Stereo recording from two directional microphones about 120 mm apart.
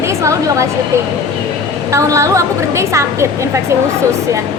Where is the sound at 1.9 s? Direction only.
25° right (ahead or behind).